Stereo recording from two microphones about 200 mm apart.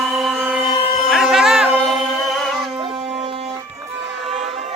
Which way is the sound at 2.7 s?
25° right (ahead or behind).